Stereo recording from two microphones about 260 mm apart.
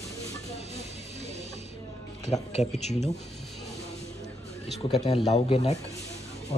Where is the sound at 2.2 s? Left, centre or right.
Left.